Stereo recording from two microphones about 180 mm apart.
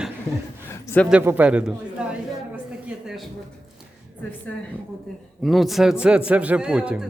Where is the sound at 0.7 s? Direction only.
15° left (ahead or behind).